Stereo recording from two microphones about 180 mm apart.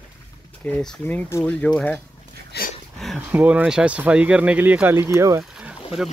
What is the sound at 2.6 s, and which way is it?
Speech, 65° left (ahead or behind).